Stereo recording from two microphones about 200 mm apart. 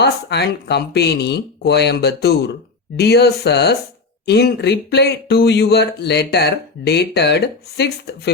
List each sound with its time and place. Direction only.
0.0 s speech: 55° left (ahead or behind)